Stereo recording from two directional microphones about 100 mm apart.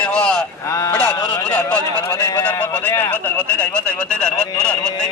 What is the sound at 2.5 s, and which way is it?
A man's voice, 15° left (ahead or behind).